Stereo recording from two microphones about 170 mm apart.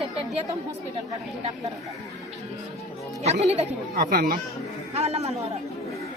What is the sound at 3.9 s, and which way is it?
Speech, 65° right (ahead or behind).